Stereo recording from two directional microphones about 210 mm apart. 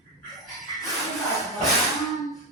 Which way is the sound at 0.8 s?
Centre (ahead or behind).